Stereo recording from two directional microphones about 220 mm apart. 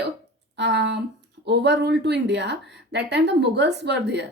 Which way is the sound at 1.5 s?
50° right (ahead or behind).